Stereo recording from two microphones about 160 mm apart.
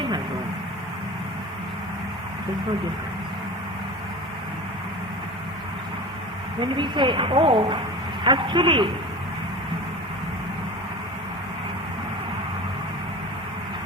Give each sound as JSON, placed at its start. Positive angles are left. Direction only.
{"t": 6.7, "sound": "a woman's voice", "side_deg": -30}